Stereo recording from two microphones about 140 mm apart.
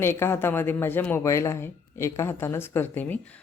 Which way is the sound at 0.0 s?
15° left (ahead or behind).